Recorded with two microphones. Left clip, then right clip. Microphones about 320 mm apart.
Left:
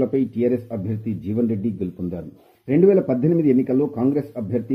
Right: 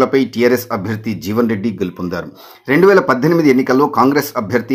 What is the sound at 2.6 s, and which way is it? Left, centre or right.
Speech, right.